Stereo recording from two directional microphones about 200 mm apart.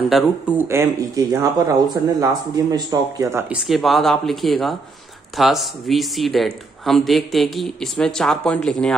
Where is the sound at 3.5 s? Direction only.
Centre (ahead or behind).